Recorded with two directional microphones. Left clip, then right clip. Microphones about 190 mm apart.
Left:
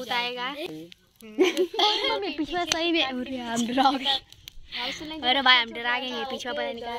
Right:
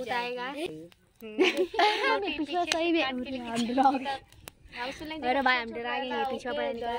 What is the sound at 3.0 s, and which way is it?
Speech, 20° left (ahead or behind).